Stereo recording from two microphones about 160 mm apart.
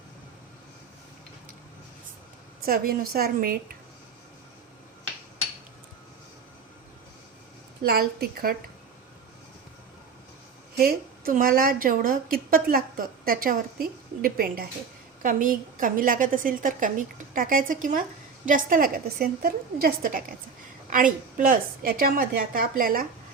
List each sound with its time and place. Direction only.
2.6 s a woman's voice: 65° right (ahead or behind)
7.9 s a woman's voice: 70° right (ahead or behind)
10.8 s a woman's voice: 70° right (ahead or behind)